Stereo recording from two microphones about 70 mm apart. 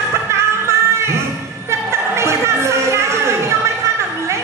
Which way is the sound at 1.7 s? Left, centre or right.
Right.